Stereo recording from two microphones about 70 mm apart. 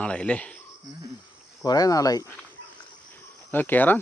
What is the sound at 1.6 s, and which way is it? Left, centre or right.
Speech, left.